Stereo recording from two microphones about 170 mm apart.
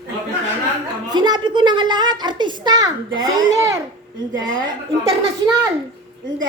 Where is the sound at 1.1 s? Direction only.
25° right (ahead or behind).